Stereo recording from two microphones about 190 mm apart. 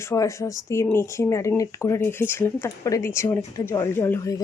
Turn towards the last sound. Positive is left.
turn(degrees=10)  # may be behind; listen again after turning